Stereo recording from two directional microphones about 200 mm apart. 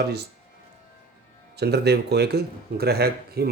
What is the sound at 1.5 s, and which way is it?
Speech, 55° right (ahead or behind).